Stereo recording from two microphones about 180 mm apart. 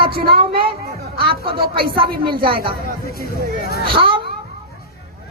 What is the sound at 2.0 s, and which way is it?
Speech, 55° right (ahead or behind).